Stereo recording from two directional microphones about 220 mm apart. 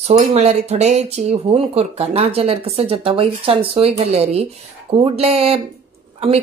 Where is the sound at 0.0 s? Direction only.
30° right (ahead or behind).